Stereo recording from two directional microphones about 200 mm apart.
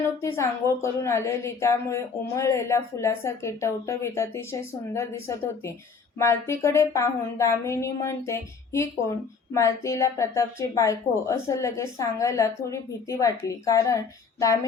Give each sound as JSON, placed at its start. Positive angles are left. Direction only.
{"t": 0.2, "sound": "a woman's voice", "side_deg": 15}